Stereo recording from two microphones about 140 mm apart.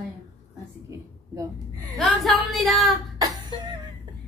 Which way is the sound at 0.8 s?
25° right (ahead or behind).